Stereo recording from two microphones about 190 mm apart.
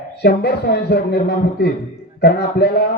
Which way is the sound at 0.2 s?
60° left (ahead or behind).